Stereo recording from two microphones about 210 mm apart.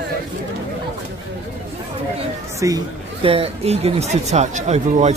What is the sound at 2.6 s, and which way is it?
Speech, 20° right (ahead or behind).